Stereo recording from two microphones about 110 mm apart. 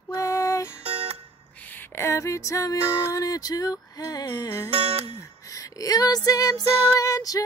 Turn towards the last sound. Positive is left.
turn(degrees=35)  # may be behind; listen again after turning